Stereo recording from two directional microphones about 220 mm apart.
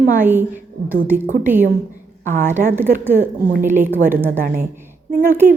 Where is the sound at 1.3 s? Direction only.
40° right (ahead or behind).